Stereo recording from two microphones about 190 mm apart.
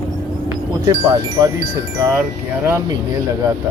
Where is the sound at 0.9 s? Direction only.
20° right (ahead or behind).